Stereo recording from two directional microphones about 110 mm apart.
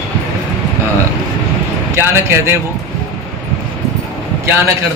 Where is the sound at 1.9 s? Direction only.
25° right (ahead or behind).